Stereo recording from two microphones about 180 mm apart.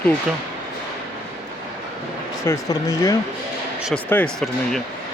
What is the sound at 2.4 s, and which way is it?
Speech, 15° left (ahead or behind).